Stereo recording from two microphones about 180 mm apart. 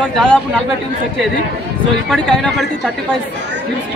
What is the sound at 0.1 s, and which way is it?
Speech, 5° left (ahead or behind).